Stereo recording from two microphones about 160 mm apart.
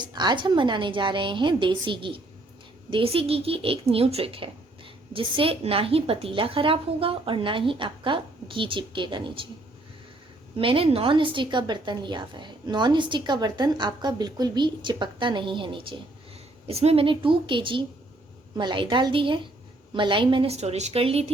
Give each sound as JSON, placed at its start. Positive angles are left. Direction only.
{"t": 0.0, "sound": "a woman's voice", "side_deg": -25}
{"t": 10.6, "sound": "a woman's voice", "side_deg": -35}